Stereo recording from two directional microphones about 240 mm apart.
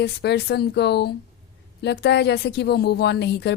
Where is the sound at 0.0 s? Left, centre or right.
Left.